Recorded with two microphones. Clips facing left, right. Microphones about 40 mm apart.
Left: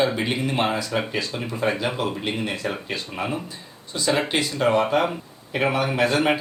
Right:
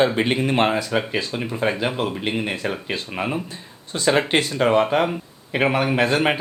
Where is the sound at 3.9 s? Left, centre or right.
Right.